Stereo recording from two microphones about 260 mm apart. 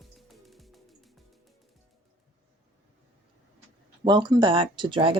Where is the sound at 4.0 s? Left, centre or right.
Centre.